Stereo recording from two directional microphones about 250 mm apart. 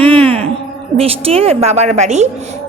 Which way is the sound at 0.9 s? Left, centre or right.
Right.